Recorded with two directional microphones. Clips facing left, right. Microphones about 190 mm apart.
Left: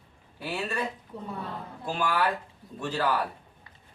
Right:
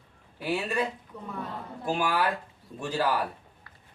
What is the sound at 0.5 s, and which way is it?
Speech, 10° right (ahead or behind).